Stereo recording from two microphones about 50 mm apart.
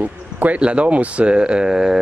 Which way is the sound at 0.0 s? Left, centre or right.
Right.